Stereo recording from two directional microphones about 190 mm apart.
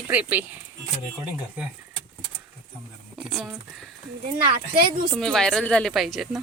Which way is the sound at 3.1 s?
Centre (ahead or behind).